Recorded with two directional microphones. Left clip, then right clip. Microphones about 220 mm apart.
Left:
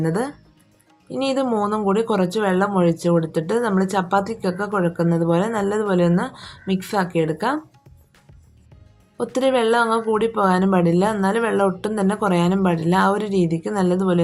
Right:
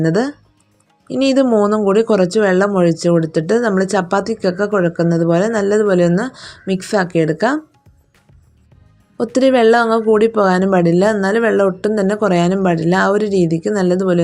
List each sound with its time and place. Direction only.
0.0 s speech: 25° right (ahead or behind)
9.1 s speech: 25° right (ahead or behind)